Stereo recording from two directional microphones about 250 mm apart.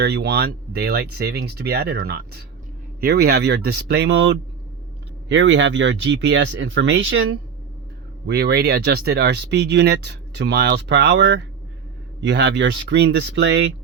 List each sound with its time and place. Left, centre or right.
0.0 s speech: right
5.3 s speech: right